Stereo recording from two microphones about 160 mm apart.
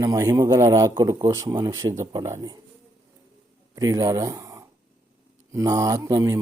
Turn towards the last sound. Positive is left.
turn(degrees=-20)  # may be behind; listen again after turning